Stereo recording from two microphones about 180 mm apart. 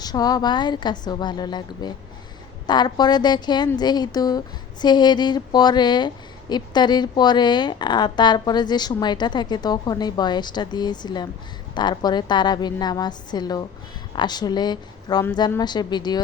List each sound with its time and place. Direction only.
0.0 s a woman's voice: 20° left (ahead or behind)